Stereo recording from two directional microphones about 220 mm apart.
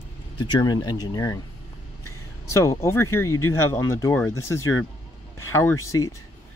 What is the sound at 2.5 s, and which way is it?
Speech, 15° left (ahead or behind).